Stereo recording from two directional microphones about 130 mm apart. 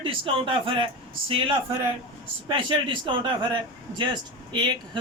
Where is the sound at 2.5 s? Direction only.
40° right (ahead or behind).